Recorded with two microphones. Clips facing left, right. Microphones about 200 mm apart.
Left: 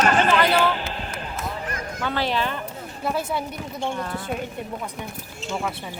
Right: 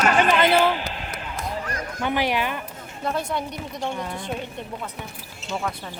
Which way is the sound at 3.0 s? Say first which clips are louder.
Even; 5° left (ahead or behind).